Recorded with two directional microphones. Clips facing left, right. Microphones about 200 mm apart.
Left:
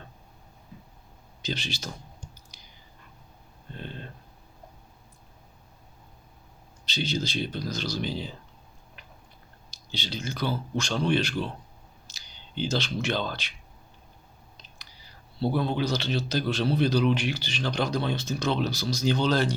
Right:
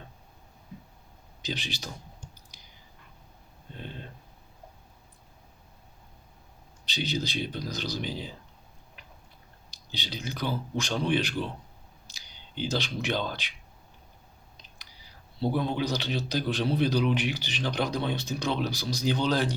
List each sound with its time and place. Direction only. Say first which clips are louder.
1.4 s speech: left 2 dB; 15° right (ahead or behind)
6.8 s a man's voice: left 1 dB; 15° right (ahead or behind)
9.7 s a man's voice: left 3 dB; 15° right (ahead or behind)
15.5 s a man's voice: left 2 dB; 15° right (ahead or behind)